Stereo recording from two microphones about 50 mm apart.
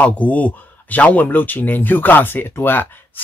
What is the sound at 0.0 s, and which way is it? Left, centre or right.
Speech, left.